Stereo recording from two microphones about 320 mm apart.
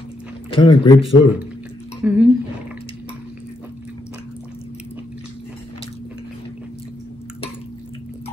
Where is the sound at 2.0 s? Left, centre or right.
Centre.